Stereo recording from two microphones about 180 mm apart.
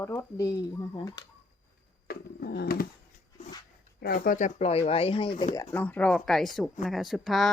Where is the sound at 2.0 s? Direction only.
55° left (ahead or behind).